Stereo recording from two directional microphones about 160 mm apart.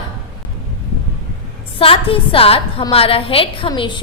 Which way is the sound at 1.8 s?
35° left (ahead or behind).